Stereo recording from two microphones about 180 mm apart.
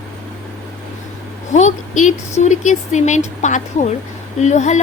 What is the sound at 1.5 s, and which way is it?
A woman's voice, 40° left (ahead or behind).